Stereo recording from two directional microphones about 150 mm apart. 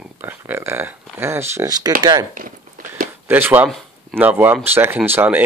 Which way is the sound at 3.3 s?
15° right (ahead or behind).